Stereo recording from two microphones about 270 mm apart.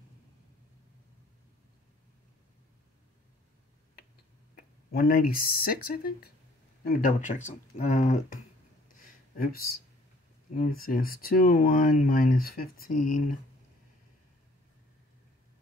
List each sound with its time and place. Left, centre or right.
4.9 s speech: left
8.8 s a sound: left
10.5 s speech: left